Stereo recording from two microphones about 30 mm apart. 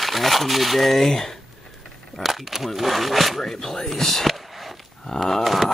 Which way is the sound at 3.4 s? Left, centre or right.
Centre.